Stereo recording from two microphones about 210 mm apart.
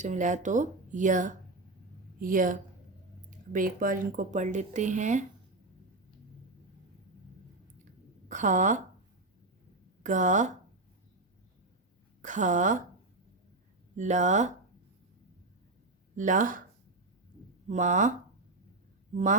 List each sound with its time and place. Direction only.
0.0 s speech: 35° right (ahead or behind)
8.3 s speech: 35° right (ahead or behind)
10.0 s speech: 35° right (ahead or behind)
12.2 s speech: 35° right (ahead or behind)
13.9 s speech: 35° right (ahead or behind)
16.1 s speech: 40° right (ahead or behind)
17.7 s speech: 35° right (ahead or behind)
19.1 s speech: 35° right (ahead or behind)